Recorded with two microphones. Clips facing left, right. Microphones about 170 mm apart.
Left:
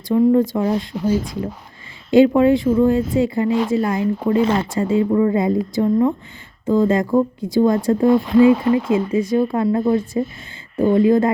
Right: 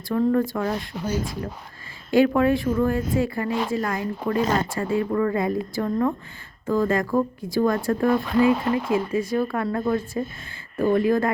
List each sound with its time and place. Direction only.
0.1 s speech: 20° left (ahead or behind)
2.0 s speech: 20° left (ahead or behind)
4.4 s speech: 40° right (ahead or behind)
4.7 s speech: 20° left (ahead or behind)